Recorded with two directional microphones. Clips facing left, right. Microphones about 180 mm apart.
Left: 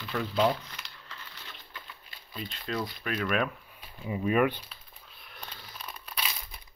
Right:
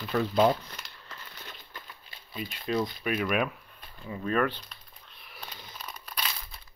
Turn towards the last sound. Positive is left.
turn(degrees=0)  # may be behind; listen again after turning